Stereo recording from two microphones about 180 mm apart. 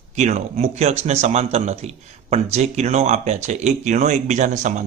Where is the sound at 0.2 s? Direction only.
40° right (ahead or behind).